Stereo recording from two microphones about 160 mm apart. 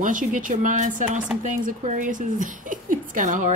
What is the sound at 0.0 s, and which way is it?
Speech, 55° right (ahead or behind).